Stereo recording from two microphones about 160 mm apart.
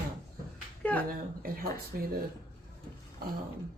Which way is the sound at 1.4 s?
70° right (ahead or behind).